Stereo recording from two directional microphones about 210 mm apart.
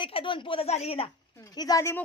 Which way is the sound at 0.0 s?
25° left (ahead or behind).